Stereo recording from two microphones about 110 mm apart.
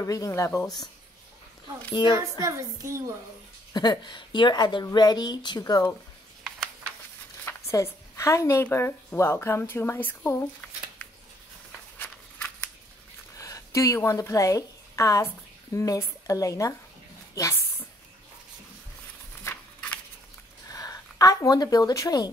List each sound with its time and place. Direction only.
0.0 s a woman's voice: 30° left (ahead or behind)
1.9 s a woman's voice: 40° left (ahead or behind)
2.4 s a woman's voice: 30° right (ahead or behind)
3.7 s a woman's voice: 40° left (ahead or behind)
7.7 s a woman's voice: 25° left (ahead or behind)
12.0 s scissors: 20° left (ahead or behind)
13.4 s a woman's voice: 30° left (ahead or behind)
17.4 s a sound: 25° left (ahead or behind)
19.4 s a sound: 15° left (ahead or behind)
20.6 s a sound: 30° left (ahead or behind)